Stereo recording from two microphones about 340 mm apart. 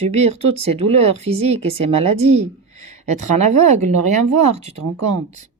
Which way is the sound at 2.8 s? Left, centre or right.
Centre.